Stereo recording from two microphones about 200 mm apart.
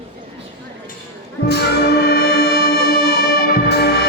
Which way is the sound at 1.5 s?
55° left (ahead or behind).